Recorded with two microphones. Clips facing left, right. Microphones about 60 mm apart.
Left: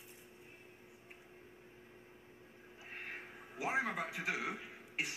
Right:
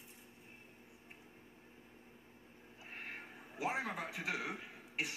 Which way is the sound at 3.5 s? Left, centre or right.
Left.